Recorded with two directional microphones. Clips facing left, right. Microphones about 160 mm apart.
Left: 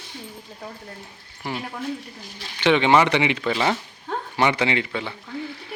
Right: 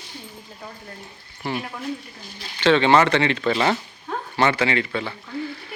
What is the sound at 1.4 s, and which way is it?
Speech, 15° left (ahead or behind).